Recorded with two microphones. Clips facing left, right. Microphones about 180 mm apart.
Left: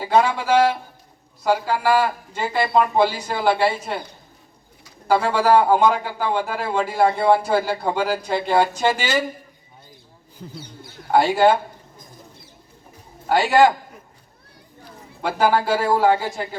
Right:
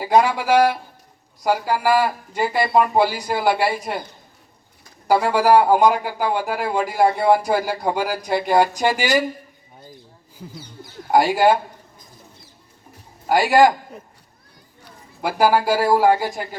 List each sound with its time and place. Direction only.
0.0 s a man's voice: 15° right (ahead or behind)
5.0 s a man's voice: 15° right (ahead or behind)
11.1 s a man's voice: 10° right (ahead or behind)
13.2 s a man's voice: 10° right (ahead or behind)
15.2 s a man's voice: 10° right (ahead or behind)